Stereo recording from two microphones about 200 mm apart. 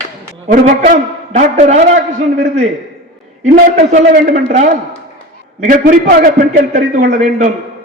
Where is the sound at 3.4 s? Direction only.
35° right (ahead or behind).